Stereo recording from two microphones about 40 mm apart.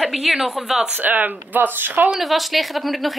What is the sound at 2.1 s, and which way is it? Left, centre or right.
Speech, centre.